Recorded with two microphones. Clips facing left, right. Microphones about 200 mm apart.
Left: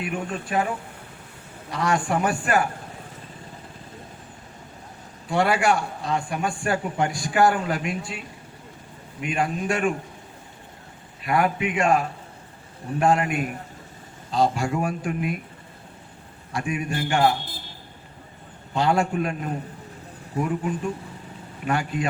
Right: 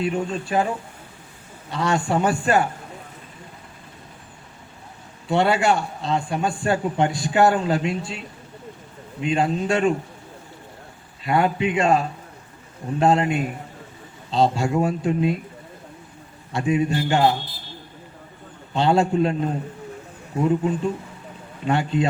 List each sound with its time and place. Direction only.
0.0 s a man's voice: 25° right (ahead or behind)
1.7 s a man's voice: 25° right (ahead or behind)
5.3 s a man's voice: 25° right (ahead or behind)
9.2 s a man's voice: 25° right (ahead or behind)
11.2 s a man's voice: 25° right (ahead or behind)
16.5 s a man's voice: 25° right (ahead or behind)
18.7 s a man's voice: 25° right (ahead or behind)